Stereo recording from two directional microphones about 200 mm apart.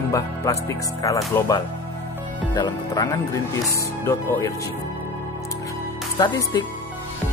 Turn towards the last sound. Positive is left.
turn(degrees=20)  # may be behind; listen again after turning